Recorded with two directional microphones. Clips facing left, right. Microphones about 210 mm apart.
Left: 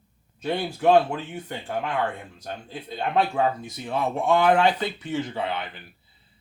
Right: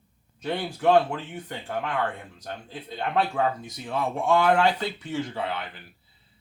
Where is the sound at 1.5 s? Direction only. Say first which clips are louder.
Left 1 dB; 25° left (ahead or behind).